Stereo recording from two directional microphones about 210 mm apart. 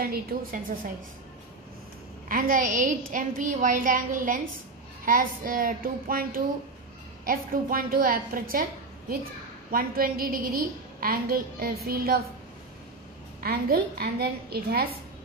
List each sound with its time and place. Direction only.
0.0 s a woman's voice: 45° right (ahead or behind)
2.2 s a woman's voice: 40° right (ahead or behind)
9.7 s a woman's voice: 45° right (ahead or behind)
13.4 s a woman's voice: 45° right (ahead or behind)